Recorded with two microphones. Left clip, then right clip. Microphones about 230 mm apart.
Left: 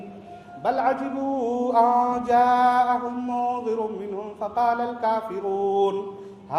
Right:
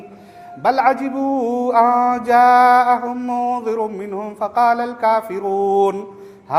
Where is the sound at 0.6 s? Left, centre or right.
Right.